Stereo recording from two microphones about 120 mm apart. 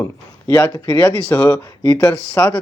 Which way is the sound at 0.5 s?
20° left (ahead or behind).